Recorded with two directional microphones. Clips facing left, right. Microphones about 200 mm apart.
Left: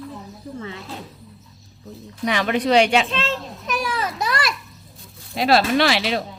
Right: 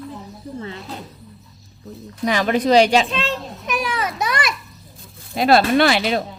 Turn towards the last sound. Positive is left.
turn(degrees=-50)  # may be behind; listen again after turning